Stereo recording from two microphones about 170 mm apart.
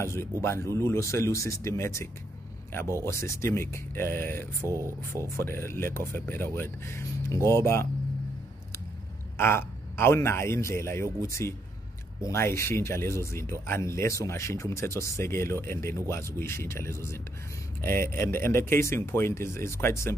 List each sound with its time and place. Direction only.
0.0 s speech: 15° left (ahead or behind)
4.6 s speech: 15° right (ahead or behind)
5.3 s speech: 15° left (ahead or behind)
9.4 s speech: 15° left (ahead or behind)